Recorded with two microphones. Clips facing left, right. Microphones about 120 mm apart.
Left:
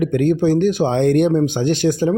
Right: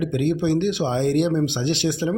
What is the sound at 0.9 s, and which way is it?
Speech, 60° left (ahead or behind).